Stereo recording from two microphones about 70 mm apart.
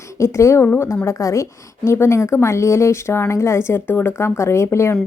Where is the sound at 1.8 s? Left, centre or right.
Left.